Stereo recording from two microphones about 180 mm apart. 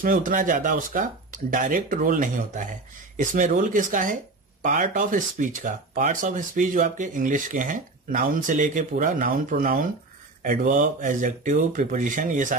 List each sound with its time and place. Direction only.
0.0 s speech: 50° right (ahead or behind)